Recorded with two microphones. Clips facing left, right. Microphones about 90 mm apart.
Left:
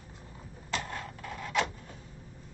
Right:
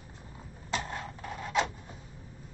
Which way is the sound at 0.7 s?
20° right (ahead or behind).